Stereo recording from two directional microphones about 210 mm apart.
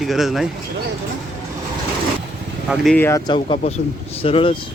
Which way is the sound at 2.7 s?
5° left (ahead or behind).